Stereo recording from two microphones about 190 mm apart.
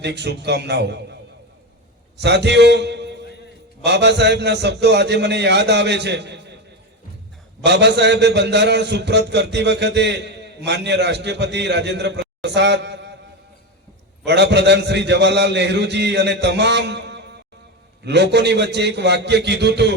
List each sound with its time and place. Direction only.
0.0 s a man's voice: 60° right (ahead or behind)
2.1 s a man's voice: 65° right (ahead or behind)
7.6 s a man's voice: 65° right (ahead or behind)
12.4 s a sound: 65° right (ahead or behind)
14.3 s a man's voice: 65° right (ahead or behind)